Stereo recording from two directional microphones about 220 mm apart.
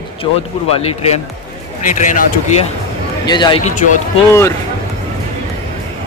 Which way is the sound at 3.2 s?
20° left (ahead or behind).